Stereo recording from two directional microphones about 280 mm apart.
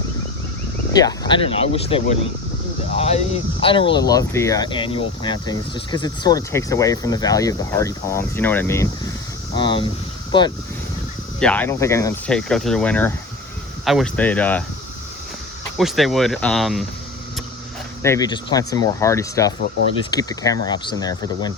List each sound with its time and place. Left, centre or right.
0.9 s speech: centre
11.3 s speech: centre
15.8 s speech: centre
18.0 s speech: centre